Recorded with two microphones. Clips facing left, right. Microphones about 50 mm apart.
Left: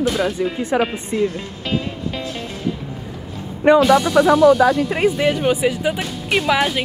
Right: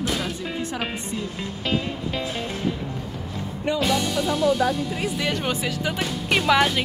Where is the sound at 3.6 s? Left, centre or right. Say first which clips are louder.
Left 13 dB; left.